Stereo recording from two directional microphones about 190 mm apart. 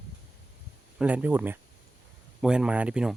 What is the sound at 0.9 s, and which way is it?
Speech, 10° right (ahead or behind).